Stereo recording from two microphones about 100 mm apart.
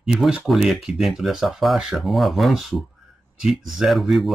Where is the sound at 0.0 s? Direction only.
5° right (ahead or behind).